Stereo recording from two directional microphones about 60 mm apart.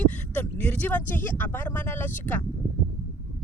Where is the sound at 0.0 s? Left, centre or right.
Left.